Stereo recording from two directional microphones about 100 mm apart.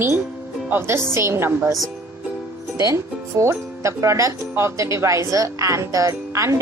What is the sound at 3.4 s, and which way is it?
Speech, 30° right (ahead or behind).